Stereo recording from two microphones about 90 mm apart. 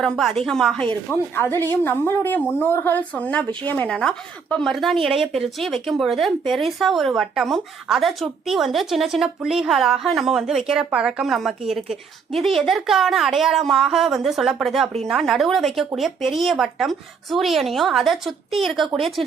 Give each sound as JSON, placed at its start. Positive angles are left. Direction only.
{"t": 0.0, "sound": "a woman's voice", "side_deg": 5}
{"t": 1.4, "sound": "a woman's voice", "side_deg": 25}